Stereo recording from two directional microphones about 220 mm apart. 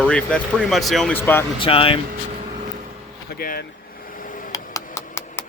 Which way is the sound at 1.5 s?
25° left (ahead or behind).